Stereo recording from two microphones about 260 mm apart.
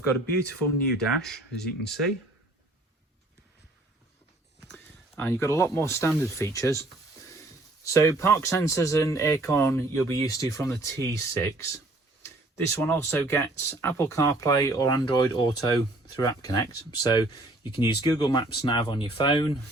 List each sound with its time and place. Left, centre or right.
0.9 s speech: centre
4.7 s speech: centre